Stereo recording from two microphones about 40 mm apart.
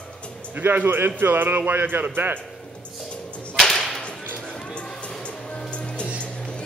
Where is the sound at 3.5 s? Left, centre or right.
Centre.